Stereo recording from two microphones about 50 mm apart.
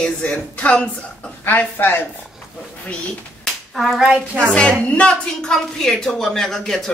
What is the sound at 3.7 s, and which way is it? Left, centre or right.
Speech, centre.